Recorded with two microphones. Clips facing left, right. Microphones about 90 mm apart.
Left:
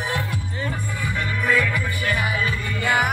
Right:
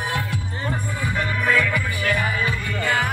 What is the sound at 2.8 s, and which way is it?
Music, 15° left (ahead or behind).